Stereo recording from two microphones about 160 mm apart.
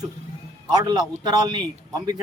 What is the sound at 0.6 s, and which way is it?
Speech, 25° right (ahead or behind).